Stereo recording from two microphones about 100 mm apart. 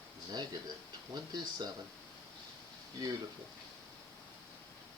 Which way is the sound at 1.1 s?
40° right (ahead or behind).